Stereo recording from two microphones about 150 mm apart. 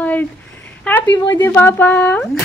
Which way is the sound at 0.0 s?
10° left (ahead or behind).